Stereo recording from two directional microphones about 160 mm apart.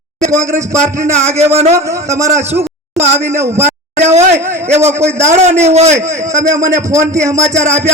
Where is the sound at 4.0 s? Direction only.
45° right (ahead or behind).